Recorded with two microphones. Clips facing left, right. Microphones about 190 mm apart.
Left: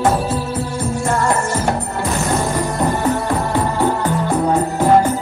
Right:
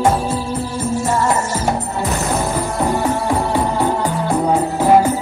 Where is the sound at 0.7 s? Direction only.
5° right (ahead or behind).